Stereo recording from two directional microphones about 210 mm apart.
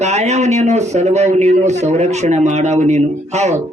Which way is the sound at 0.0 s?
35° right (ahead or behind).